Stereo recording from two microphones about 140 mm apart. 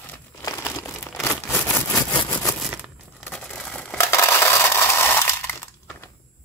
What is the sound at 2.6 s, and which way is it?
Crumpling, 5° right (ahead or behind).